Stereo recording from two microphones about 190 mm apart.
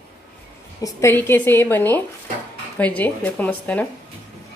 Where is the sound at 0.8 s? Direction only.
15° left (ahead or behind).